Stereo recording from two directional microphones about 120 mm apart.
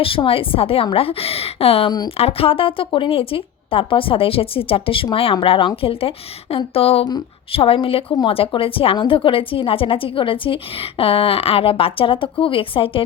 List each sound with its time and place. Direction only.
0.0 s a woman's voice: 50° left (ahead or behind)